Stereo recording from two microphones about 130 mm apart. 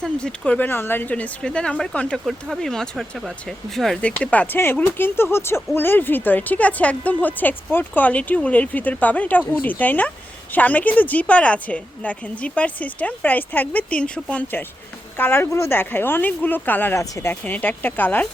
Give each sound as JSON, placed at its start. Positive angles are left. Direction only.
{"t": 0.0, "sound": "speech", "side_deg": 5}